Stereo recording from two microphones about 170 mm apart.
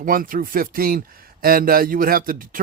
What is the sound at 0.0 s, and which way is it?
Speech, 55° right (ahead or behind).